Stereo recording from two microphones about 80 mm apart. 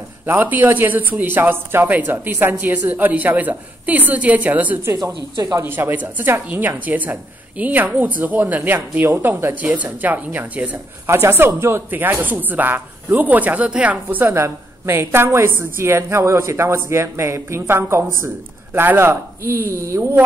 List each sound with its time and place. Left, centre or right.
0.3 s a woman's voice: right
4.9 s a woman's voice: right
5.7 s a woman's voice: right
11.1 s a woman's voice: right
14.3 s a woman's voice: right